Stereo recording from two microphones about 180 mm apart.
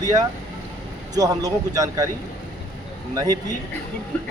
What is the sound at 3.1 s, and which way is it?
Speech, 20° right (ahead or behind).